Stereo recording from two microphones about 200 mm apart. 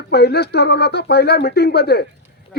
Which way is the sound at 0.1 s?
55° left (ahead or behind).